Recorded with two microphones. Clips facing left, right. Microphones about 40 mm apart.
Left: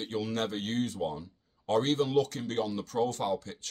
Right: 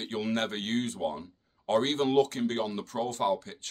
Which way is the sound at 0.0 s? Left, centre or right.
Right.